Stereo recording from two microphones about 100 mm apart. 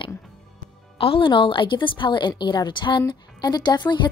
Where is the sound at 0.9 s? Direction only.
65° left (ahead or behind).